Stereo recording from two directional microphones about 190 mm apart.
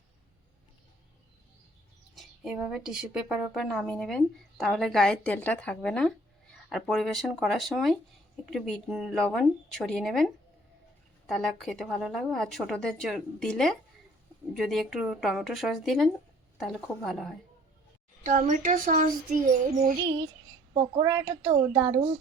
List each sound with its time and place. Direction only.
2.1 s a woman's voice: 5° right (ahead or behind)
18.2 s speech: 45° right (ahead or behind)
20.1 s speech: 20° right (ahead or behind)